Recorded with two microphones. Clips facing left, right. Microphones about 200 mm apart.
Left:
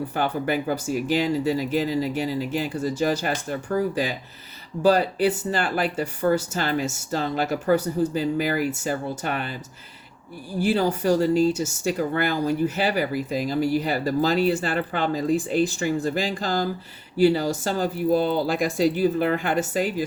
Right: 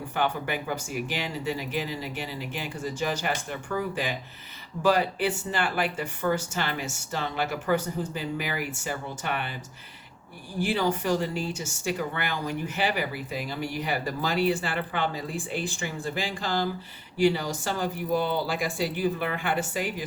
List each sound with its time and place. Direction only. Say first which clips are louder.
0.1 s speech: left 1 dB; 40° left (ahead or behind)
10.6 s speech: left 4 dB; 40° left (ahead or behind)